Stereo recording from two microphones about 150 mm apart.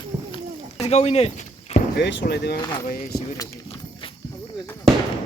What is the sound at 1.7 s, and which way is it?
Boat, 45° left (ahead or behind).